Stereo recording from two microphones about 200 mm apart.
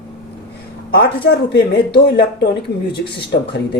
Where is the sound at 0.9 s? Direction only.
55° left (ahead or behind).